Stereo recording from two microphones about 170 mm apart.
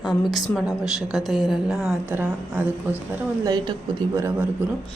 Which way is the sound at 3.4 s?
20° right (ahead or behind).